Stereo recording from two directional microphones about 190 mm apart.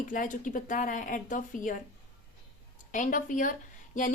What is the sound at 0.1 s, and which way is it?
A woman's voice, 45° left (ahead or behind).